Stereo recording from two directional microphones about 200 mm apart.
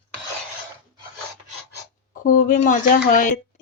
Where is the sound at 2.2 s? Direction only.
40° left (ahead or behind).